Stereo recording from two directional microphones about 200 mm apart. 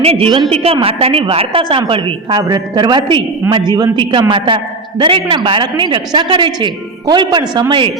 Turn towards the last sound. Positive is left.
turn(degrees=-20)  # may be behind; listen again after turning